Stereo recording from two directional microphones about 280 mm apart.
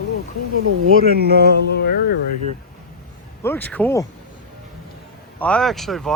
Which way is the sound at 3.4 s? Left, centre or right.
Centre.